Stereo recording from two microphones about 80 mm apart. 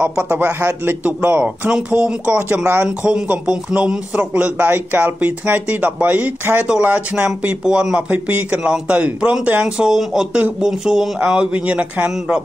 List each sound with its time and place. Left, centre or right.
0.3 s speech: right
7.6 s speech: centre
8.1 s speech: right